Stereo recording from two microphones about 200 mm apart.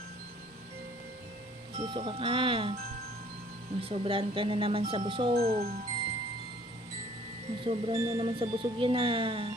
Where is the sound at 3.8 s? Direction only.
30° right (ahead or behind).